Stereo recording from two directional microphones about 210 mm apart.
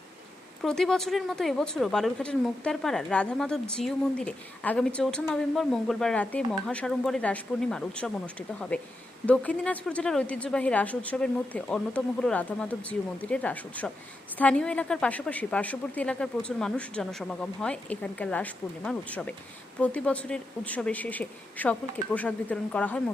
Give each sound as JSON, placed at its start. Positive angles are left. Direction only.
{"t": 0.6, "sound": "speech", "side_deg": 0}